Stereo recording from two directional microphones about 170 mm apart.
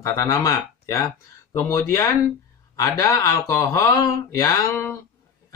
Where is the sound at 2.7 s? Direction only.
20° left (ahead or behind).